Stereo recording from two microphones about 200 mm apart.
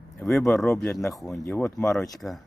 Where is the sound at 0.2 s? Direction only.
Centre (ahead or behind).